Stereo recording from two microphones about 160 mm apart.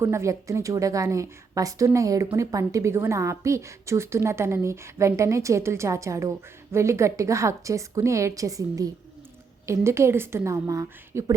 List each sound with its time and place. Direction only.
0.0 s a woman's voice: 15° right (ahead or behind)